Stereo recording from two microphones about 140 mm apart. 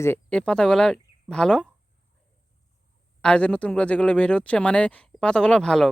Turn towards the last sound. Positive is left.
turn(degrees=5)  # may be behind; listen again after turning